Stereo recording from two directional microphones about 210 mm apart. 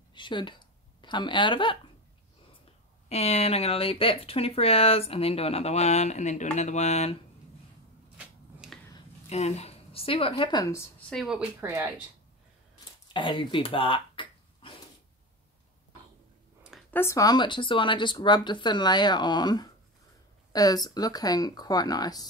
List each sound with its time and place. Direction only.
0.1 s speech: 20° left (ahead or behind)
3.1 s speech: 30° left (ahead or behind)
8.2 s finger snapping: 5° right (ahead or behind)
9.3 s speech: 30° left (ahead or behind); by 10.9 s 15° left (ahead or behind)
11.1 s speech: centre (ahead or behind)
13.1 s a sound: 25° left (ahead or behind)
16.9 s speech: 15° left (ahead or behind)